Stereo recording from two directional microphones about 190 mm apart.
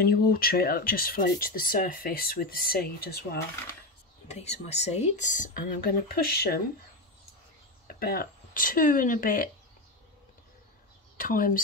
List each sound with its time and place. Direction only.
0.0 s speech: 55° left (ahead or behind)
4.3 s speech: 35° left (ahead or behind); by 6.6 s 55° left (ahead or behind)
8.0 s speech: 50° left (ahead or behind)
11.1 s speech: 45° left (ahead or behind)